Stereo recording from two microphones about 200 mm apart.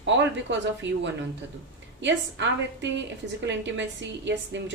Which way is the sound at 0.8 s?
65° right (ahead or behind).